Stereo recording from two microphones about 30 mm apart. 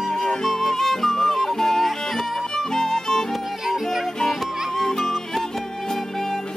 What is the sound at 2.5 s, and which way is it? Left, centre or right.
Music, centre.